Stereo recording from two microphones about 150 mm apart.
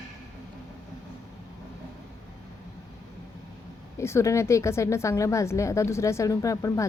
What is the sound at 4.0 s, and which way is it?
A woman's voice, 20° left (ahead or behind).